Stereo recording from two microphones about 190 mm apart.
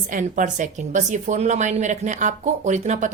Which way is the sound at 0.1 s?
40° right (ahead or behind).